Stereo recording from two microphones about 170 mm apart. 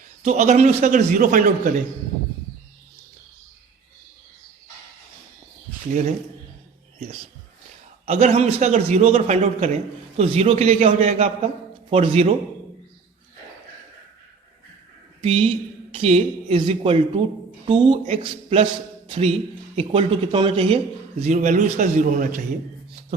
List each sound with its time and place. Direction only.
0.2 s a man's voice: 45° right (ahead or behind)
5.9 s a man's voice: 45° right (ahead or behind)
8.0 s a man's voice: 40° right (ahead or behind)
15.2 s a woman's voice: 35° right (ahead or behind)
19.7 s a man's voice: 30° right (ahead or behind)
21.2 s a man's voice: 45° right (ahead or behind)